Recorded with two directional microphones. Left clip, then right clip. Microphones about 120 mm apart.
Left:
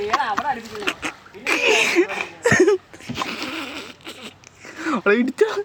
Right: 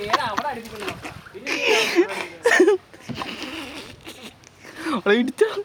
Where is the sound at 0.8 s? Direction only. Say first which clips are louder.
Left 6 dB; 30° left (ahead or behind).